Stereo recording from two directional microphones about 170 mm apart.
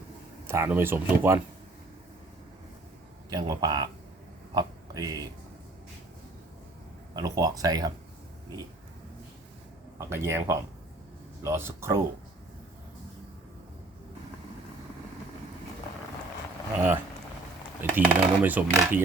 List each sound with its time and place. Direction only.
0.4 s speech: 15° right (ahead or behind)
3.2 s speech: 20° right (ahead or behind)
7.2 s speech: 20° right (ahead or behind)
10.0 s speech: 15° right (ahead or behind)
16.7 s speech: 10° right (ahead or behind)